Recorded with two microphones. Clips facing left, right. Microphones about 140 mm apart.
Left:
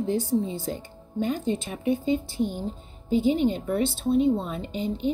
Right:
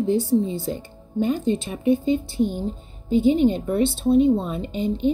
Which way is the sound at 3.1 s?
20° right (ahead or behind).